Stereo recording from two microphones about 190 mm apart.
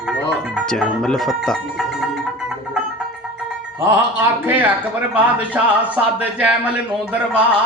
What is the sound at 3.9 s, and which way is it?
A man's voice, 10° right (ahead or behind).